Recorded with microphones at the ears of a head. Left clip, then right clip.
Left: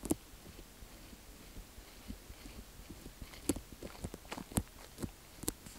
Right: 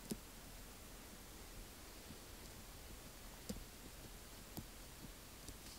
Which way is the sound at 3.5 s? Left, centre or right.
Left.